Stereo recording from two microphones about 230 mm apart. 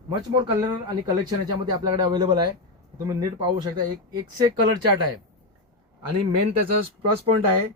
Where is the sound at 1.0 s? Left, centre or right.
Centre.